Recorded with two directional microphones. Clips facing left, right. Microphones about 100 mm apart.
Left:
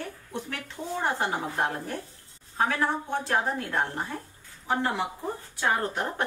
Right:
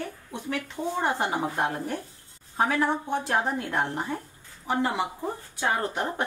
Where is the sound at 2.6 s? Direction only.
20° right (ahead or behind).